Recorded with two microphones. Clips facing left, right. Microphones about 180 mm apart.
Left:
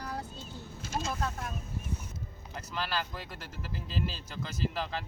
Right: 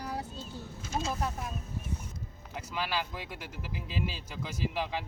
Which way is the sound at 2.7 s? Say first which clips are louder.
Right 1 dB; 10° right (ahead or behind).